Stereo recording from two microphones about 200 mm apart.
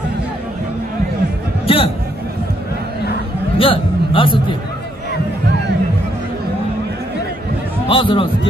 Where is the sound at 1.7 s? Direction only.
30° left (ahead or behind).